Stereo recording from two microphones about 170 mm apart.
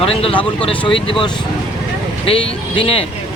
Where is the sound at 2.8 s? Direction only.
35° left (ahead or behind).